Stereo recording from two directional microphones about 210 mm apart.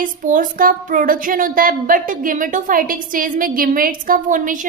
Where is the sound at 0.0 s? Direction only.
40° right (ahead or behind).